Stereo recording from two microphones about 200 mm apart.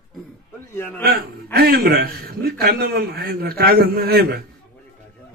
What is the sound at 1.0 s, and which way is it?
A man's voice, 50° right (ahead or behind).